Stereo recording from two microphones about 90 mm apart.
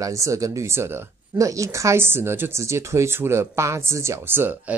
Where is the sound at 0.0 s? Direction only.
35° right (ahead or behind).